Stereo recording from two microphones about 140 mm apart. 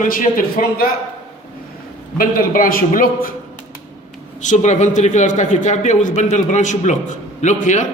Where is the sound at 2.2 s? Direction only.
90° left.